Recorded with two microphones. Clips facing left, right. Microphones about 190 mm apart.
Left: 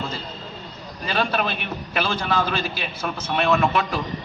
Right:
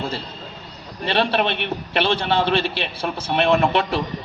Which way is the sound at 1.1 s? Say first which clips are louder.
Right 3 dB; 30° right (ahead or behind).